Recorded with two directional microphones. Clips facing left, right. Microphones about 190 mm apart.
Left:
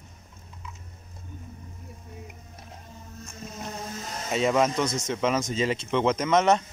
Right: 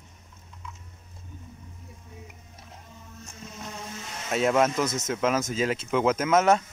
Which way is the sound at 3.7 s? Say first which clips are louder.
Left 3 dB; 40° left (ahead or behind).